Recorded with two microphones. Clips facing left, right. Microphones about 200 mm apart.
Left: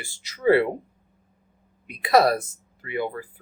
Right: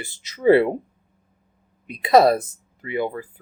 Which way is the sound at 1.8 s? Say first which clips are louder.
Right 4 dB; 20° right (ahead or behind).